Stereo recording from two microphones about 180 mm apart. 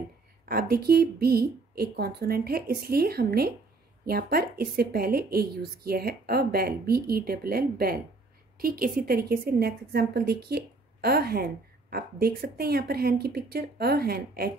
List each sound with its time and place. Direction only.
0.5 s a woman's voice: 60° right (ahead or behind)